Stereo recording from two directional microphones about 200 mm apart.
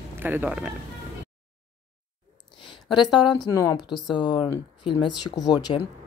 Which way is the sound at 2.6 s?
25° left (ahead or behind).